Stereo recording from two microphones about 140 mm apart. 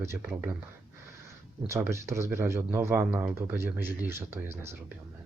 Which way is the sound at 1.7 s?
20° right (ahead or behind).